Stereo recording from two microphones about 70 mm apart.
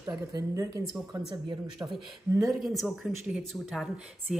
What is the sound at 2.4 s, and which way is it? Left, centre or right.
A woman's voice, centre.